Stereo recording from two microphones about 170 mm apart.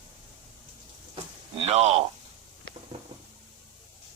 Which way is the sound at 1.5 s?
35° right (ahead or behind).